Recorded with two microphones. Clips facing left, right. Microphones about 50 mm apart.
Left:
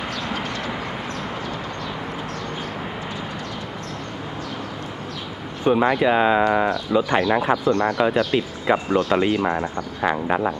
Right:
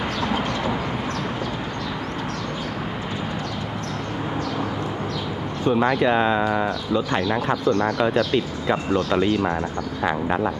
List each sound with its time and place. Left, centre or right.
5.6 s speech: centre